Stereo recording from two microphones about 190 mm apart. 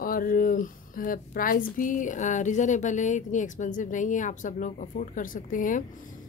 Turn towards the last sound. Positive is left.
turn(degrees=45)  # may be behind; listen again after turning